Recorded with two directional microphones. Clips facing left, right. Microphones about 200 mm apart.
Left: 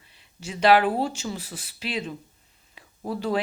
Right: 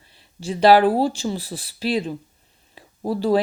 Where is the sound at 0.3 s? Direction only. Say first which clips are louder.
Right 5 dB; 35° right (ahead or behind).